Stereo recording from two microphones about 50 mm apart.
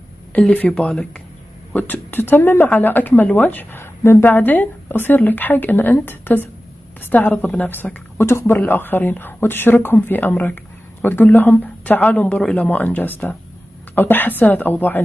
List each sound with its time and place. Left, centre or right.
0.4 s speech: left
1.7 s a woman's voice: left
8.5 s a woman's voice: left